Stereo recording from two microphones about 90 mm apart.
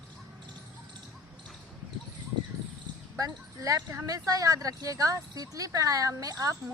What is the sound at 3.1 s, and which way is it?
Speech, 40° right (ahead or behind).